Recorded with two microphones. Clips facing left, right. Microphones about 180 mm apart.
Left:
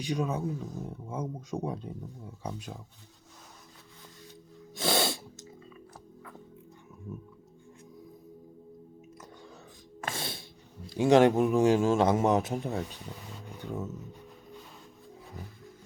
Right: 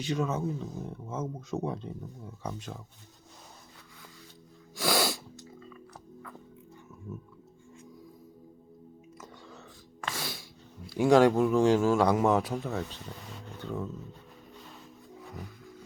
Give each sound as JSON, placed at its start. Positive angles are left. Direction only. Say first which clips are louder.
{"t": 0.0, "sound": "speech", "louder": "right 1 dB", "side_deg": 15}
{"t": 4.7, "sound": "sneeze", "louder": "even", "side_deg": 25}
{"t": 10.2, "sound": "a sound", "louder": "even", "side_deg": 25}
{"t": 10.8, "sound": "a man's voice", "louder": "even", "side_deg": 20}